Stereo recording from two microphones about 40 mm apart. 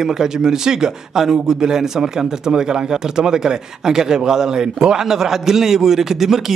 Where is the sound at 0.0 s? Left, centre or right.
Centre.